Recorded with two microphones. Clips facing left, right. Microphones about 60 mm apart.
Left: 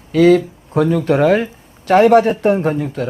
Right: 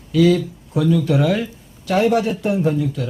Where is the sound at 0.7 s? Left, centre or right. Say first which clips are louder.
Left 3 dB; left.